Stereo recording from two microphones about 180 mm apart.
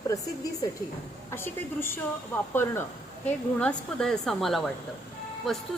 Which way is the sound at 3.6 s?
5° left (ahead or behind).